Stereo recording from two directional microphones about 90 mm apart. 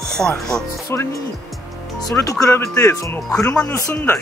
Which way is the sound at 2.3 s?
35° left (ahead or behind).